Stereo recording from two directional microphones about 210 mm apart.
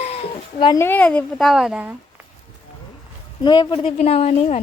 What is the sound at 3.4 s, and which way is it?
A woman's voice, 20° left (ahead or behind).